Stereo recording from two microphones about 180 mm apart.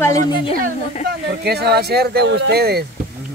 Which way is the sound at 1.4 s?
65° right (ahead or behind).